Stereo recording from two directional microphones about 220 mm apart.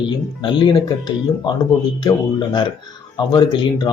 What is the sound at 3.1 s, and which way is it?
Speech, 20° left (ahead or behind).